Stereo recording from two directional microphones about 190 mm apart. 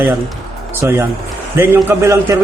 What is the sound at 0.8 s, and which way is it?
Speech, 15° right (ahead or behind).